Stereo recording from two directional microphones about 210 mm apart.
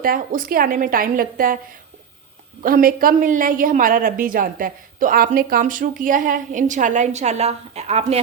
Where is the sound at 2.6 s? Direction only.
45° right (ahead or behind).